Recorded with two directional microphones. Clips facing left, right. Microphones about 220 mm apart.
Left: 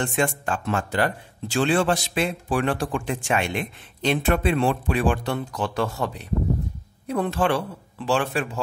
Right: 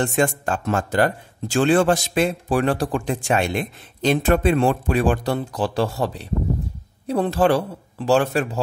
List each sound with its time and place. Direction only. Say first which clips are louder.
0.0 s speech: right 4 dB; 40° right (ahead or behind)